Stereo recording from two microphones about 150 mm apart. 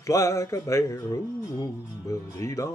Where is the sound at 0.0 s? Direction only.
20° left (ahead or behind).